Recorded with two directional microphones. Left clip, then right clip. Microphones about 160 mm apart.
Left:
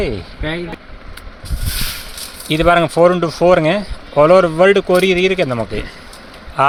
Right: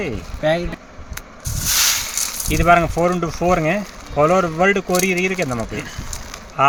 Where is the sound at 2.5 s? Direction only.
30° left (ahead or behind).